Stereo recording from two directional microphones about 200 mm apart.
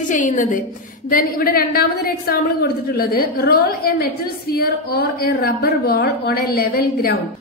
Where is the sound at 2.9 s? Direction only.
50° left (ahead or behind).